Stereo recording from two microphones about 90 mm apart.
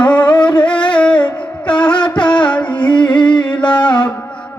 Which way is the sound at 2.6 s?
60° left (ahead or behind).